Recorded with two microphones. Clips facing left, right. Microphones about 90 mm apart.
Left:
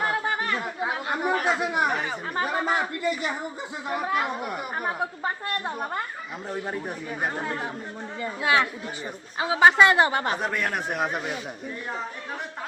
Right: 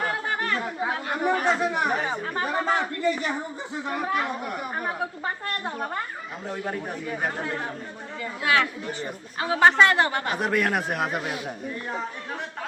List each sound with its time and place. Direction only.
0.0 s chatter: 10° left (ahead or behind)
2.3 s speech: 15° left (ahead or behind)
8.2 s speech: 20° left (ahead or behind)
9.4 s speech: 10° left (ahead or behind)
10.4 s a man's voice: 5° right (ahead or behind)